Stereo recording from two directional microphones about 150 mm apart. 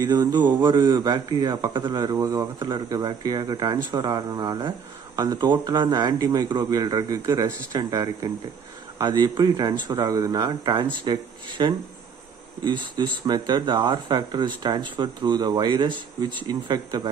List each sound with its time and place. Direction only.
0.0 s speech: 25° right (ahead or behind)